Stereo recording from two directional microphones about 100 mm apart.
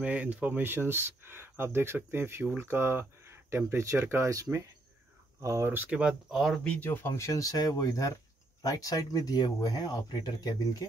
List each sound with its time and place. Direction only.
0.0 s speech: 15° right (ahead or behind)
6.3 s speech: 5° left (ahead or behind); by 10.9 s 35° left (ahead or behind)